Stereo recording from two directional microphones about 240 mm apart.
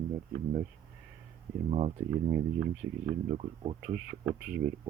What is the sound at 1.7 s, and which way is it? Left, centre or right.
Speech, right.